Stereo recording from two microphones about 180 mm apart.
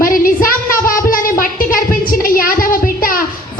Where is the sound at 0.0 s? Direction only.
50° left (ahead or behind).